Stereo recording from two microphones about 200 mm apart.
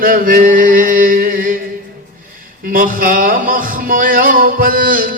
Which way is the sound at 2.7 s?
45° right (ahead or behind).